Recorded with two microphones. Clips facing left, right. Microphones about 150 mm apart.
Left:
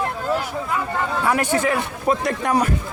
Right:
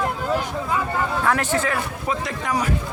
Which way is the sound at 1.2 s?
10° left (ahead or behind).